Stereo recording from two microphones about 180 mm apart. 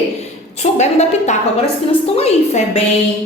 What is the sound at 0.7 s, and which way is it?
A woman's voice, 40° left (ahead or behind).